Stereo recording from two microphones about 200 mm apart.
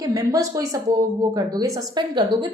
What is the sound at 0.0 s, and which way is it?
A woman's voice, 15° right (ahead or behind).